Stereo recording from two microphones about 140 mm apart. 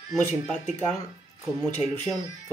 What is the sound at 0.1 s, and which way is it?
Speech, 10° left (ahead or behind).